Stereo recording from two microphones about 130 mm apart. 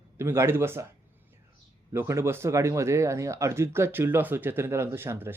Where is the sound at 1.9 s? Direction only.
20° right (ahead or behind).